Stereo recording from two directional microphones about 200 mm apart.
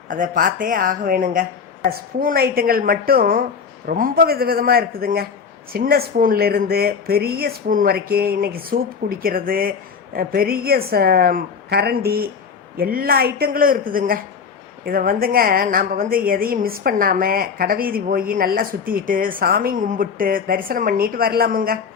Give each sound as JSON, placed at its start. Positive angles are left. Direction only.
{"t": 0.1, "sound": "a woman's voice", "side_deg": -45}